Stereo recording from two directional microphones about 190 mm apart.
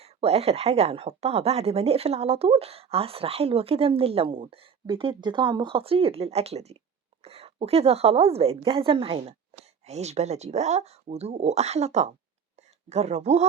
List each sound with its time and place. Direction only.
0.0 s speech: 30° right (ahead or behind)